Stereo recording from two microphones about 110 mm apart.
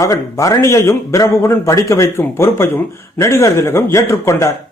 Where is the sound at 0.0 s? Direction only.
30° left (ahead or behind).